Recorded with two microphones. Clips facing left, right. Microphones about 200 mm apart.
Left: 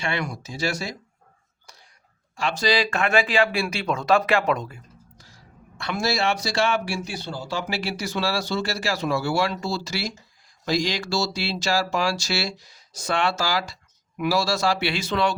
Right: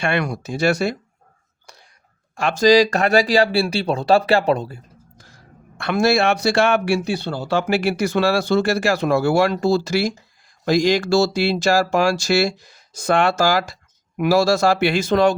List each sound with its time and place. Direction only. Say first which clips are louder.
0.0 s speech: right 7 dB; 55° right (ahead or behind)
2.3 s speech: right 9 dB; 50° right (ahead or behind); by 4.8 s 30° right (ahead or behind)
5.1 s speech: right 4 dB; 50° right (ahead or behind)